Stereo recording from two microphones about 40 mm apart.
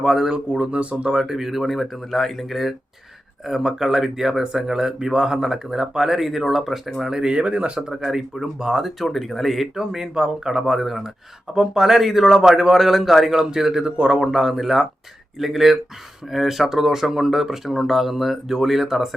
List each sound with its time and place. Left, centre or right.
0.0 s speech: centre
0.3 s speech: right
1.1 s speech: centre
7.2 s speech: right
8.0 s speech: centre
9.0 s speech: centre
9.7 s speech: centre
10.7 s speech: centre
11.5 s speech: centre
13.8 s speech: right
14.2 s speech: centre